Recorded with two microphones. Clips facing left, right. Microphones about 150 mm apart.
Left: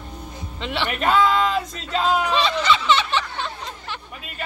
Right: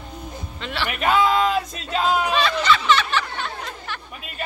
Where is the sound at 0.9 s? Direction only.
5° right (ahead or behind).